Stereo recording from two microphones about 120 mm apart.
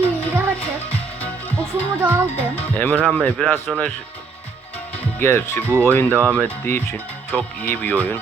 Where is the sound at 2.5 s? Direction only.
10° left (ahead or behind).